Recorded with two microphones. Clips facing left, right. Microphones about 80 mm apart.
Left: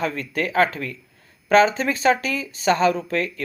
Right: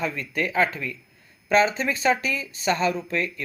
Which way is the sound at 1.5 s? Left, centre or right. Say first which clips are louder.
Left 4 dB; left.